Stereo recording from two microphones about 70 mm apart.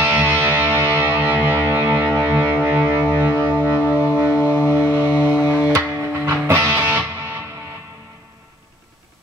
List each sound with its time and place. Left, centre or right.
0.0 s music: right